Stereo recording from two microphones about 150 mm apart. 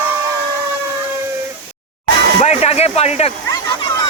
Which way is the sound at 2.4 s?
45° left (ahead or behind).